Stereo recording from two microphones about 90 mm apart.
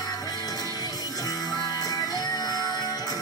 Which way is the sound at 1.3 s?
45° left (ahead or behind).